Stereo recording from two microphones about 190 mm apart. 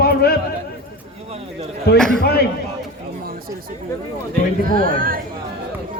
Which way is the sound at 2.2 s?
55° left (ahead or behind).